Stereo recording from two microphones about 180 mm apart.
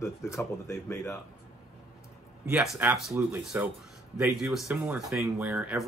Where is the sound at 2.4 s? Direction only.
5° right (ahead or behind).